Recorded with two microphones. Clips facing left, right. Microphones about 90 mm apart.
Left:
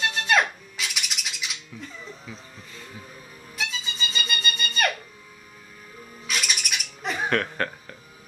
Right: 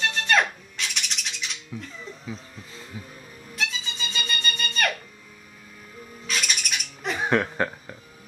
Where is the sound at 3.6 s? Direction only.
Centre (ahead or behind).